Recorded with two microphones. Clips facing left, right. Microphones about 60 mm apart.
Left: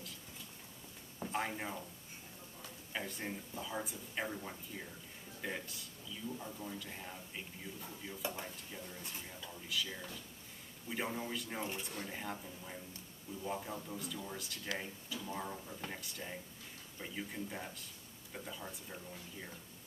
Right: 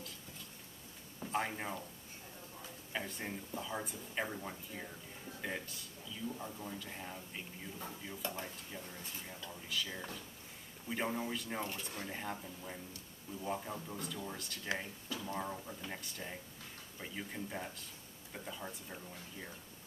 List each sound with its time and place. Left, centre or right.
1.3 s speech: centre
2.9 s a man's voice: centre
11.6 s speech: centre
11.9 s speech: centre